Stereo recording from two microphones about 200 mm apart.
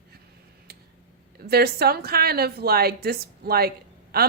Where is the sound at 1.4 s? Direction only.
50° right (ahead or behind).